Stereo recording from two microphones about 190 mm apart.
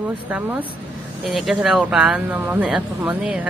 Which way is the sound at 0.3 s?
10° right (ahead or behind).